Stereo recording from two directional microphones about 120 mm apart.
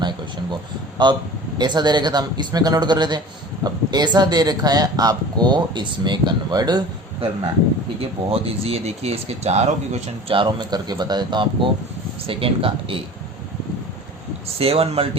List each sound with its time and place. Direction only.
1.0 s speech: 40° right (ahead or behind)
8.3 s speech: 55° right (ahead or behind)
10.3 s speech: 40° right (ahead or behind)
14.4 s a man's voice: 55° right (ahead or behind)